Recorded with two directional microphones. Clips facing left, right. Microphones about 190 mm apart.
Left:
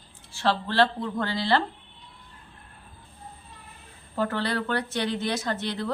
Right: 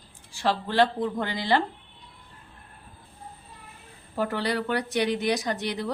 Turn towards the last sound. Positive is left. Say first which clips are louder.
# even
turn(degrees=-15)  # may be behind; listen again after turning